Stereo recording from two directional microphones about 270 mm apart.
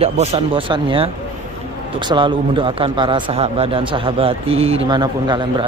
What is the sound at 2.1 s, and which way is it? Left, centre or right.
A man's voice, centre.